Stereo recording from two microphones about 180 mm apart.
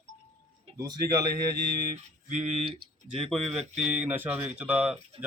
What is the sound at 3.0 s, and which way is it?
A man's voice, 5° right (ahead or behind).